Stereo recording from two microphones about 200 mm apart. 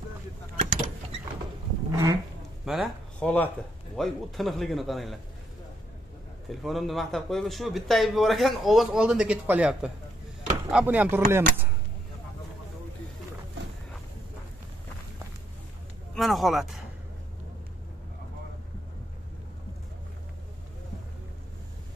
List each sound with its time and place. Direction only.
1.9 s insect: 20° right (ahead or behind)
2.6 s a sound: centre (ahead or behind)
3.9 s a man's voice: centre (ahead or behind)
6.5 s a man's voice: centre (ahead or behind)
10.7 s chopping: 5° right (ahead or behind)
16.2 s a man's voice: centre (ahead or behind)